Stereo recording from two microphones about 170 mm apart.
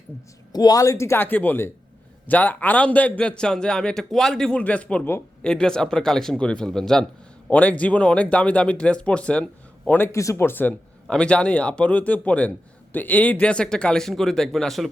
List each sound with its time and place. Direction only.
0.5 s a man's voice: 20° left (ahead or behind); by 14.8 s centre (ahead or behind)